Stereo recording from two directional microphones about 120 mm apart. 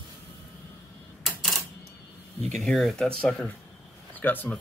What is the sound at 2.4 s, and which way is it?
Speech, 70° right (ahead or behind).